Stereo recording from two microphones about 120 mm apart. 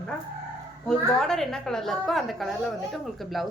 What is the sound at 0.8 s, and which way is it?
A woman's voice, 5° left (ahead or behind).